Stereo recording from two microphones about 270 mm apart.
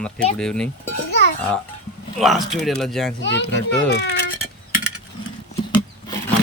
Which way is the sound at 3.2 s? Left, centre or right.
Left.